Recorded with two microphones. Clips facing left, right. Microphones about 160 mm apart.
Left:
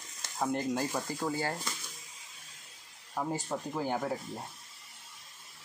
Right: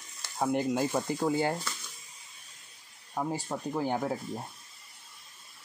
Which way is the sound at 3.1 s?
10° right (ahead or behind).